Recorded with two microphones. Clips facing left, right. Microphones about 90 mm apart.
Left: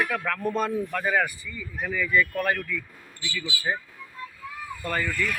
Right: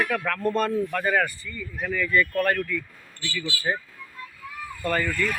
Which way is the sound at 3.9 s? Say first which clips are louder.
Left 1 dB; 15° left (ahead or behind).